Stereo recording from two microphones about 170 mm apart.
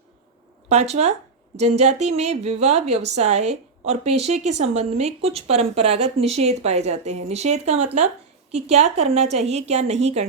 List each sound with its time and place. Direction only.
0.7 s speech: 40° right (ahead or behind)